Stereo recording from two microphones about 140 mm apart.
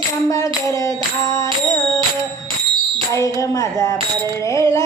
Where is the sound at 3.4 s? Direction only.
25° left (ahead or behind).